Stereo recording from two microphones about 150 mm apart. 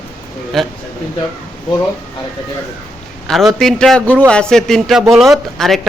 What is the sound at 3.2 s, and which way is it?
A man's voice, centre (ahead or behind).